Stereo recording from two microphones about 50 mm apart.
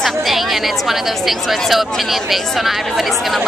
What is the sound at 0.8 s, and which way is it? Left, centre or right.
Speech, centre.